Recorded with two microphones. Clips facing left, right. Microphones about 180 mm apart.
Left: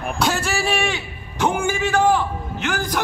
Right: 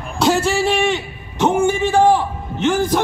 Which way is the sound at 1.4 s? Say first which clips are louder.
Right 5 dB; 25° right (ahead or behind).